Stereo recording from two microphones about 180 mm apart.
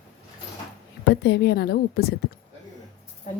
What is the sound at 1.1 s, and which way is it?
A woman's voice, 65° left (ahead or behind).